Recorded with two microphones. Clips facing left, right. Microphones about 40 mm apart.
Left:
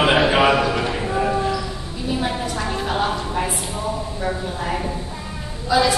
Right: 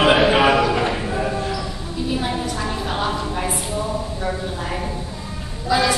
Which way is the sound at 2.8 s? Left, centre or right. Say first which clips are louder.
Left 2 dB; centre.